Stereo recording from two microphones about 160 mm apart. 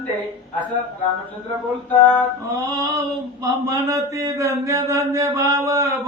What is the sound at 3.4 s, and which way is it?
Speech, 20° right (ahead or behind).